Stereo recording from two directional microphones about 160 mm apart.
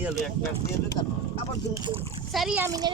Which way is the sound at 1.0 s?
25° left (ahead or behind).